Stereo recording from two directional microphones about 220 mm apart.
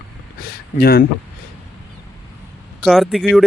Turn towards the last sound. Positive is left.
turn(degrees=0)  # may be behind; listen again after turning